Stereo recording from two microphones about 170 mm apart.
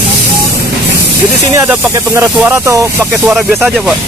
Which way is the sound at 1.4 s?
15° right (ahead or behind).